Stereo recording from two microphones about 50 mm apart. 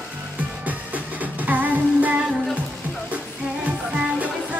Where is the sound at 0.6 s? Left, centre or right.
Right.